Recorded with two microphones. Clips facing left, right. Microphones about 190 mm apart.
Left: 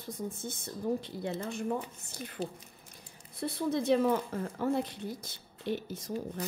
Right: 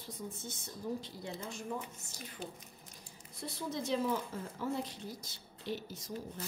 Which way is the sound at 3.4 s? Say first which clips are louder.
Left 8 dB; 60° left (ahead or behind).